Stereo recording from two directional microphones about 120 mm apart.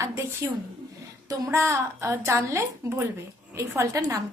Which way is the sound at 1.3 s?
20° right (ahead or behind).